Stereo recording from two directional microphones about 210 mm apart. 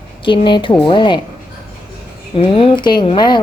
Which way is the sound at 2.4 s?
25° left (ahead or behind).